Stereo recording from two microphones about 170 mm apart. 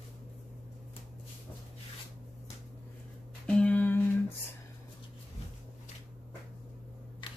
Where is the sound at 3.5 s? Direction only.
5° left (ahead or behind).